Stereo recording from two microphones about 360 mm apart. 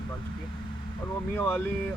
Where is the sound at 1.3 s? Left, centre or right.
Centre.